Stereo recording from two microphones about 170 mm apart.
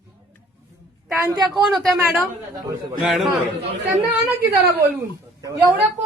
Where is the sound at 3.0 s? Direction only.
Centre (ahead or behind).